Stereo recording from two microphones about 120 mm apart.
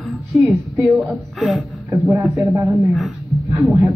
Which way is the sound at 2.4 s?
15° right (ahead or behind).